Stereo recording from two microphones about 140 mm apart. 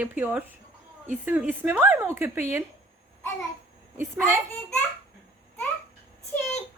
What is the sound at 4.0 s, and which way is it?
Speech, 15° right (ahead or behind).